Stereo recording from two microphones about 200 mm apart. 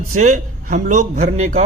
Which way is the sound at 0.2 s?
35° right (ahead or behind).